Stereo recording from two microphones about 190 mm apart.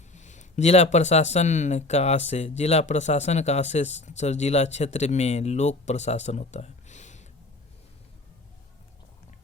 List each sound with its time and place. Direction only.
0.1 s speech: 40° left (ahead or behind)